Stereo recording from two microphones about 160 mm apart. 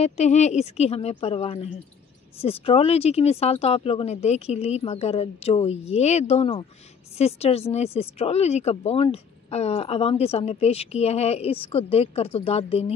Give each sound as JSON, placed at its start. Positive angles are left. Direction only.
{"t": 0.0, "sound": "speech", "side_deg": 45}